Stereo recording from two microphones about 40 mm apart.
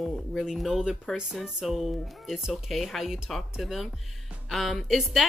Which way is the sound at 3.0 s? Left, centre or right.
Centre.